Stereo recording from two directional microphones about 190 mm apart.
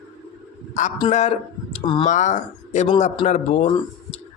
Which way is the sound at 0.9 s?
30° left (ahead or behind).